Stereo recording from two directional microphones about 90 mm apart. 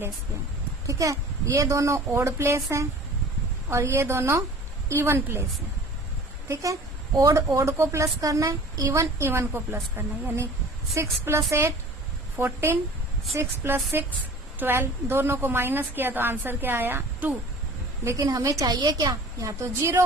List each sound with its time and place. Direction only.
0.9 s a woman's voice: 35° right (ahead or behind)
6.5 s a woman's voice: 35° right (ahead or behind); by 17.3 s 20° right (ahead or behind)
18.0 s a woman's voice: 40° right (ahead or behind)